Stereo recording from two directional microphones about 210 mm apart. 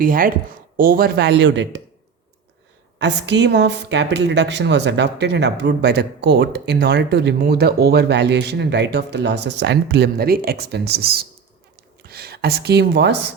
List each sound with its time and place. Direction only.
0.0 s speech: 40° right (ahead or behind)
3.0 s speech: 55° right (ahead or behind)